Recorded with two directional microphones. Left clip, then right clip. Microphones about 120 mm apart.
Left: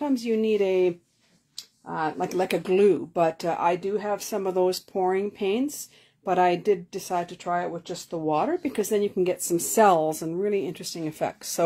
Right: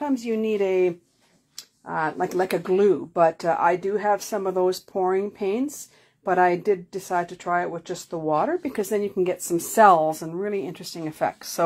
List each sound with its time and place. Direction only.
0.0 s speech: 25° left (ahead or behind)
1.6 s a sound: 10° right (ahead or behind)
2.6 s speech: 20° left (ahead or behind); by 4.4 s centre (ahead or behind)
4.4 s speech: 15° left (ahead or behind)
7.2 s speech: centre (ahead or behind)
8.3 s speech: 20° left (ahead or behind); by 11.6 s 35° left (ahead or behind)